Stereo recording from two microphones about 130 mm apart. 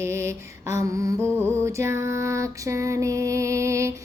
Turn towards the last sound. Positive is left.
turn(degrees=-20)  # may be behind; listen again after turning